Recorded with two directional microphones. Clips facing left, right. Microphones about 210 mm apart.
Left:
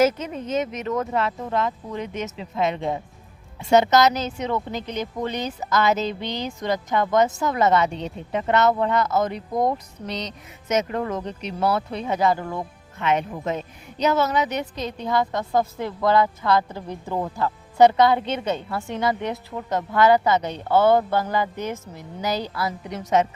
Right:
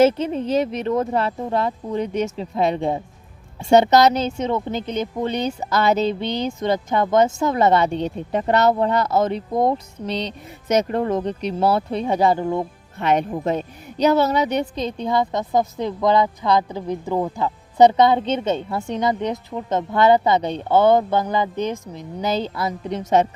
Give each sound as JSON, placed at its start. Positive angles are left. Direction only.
{"t": 0.0, "sound": "a woman's voice", "side_deg": -30}
{"t": 13.0, "sound": "a woman's voice", "side_deg": -35}